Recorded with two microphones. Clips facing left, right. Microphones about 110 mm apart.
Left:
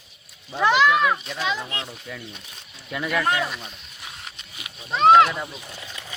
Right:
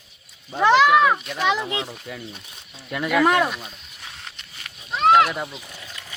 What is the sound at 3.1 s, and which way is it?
Speech, 90° right.